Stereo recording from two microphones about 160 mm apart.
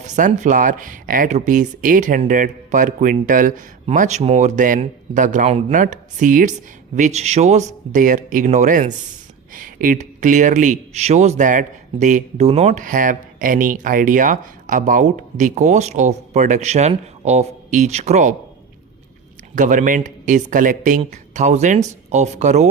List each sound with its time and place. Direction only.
0.0 s speech: 50° right (ahead or behind)
7.9 s speech: 55° right (ahead or behind)
19.5 s speech: 55° right (ahead or behind)